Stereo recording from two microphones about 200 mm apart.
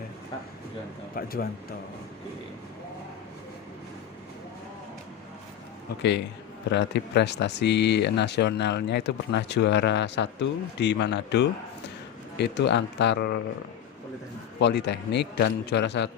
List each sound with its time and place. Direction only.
1.1 s speech: 50° left (ahead or behind)
6.0 s speech: 60° left (ahead or behind)
14.6 s speech: 60° left (ahead or behind)